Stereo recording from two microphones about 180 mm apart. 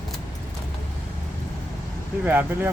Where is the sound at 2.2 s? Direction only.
10° right (ahead or behind).